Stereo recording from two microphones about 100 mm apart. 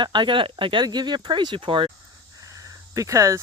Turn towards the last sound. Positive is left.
turn(degrees=-30)  # may be behind; listen again after turning